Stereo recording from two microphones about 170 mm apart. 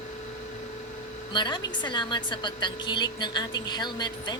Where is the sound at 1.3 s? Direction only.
25° left (ahead or behind).